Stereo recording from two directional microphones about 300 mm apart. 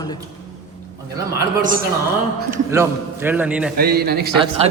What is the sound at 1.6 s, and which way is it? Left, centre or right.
Speech, right.